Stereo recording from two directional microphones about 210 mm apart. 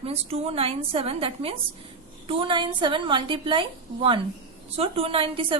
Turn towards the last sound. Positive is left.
turn(degrees=-25)  # may be behind; listen again after turning